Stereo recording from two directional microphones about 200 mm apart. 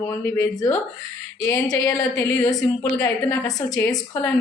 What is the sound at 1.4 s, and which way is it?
A woman's voice, 15° left (ahead or behind).